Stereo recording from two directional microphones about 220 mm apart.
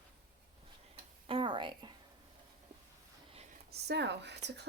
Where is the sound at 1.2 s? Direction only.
25° right (ahead or behind).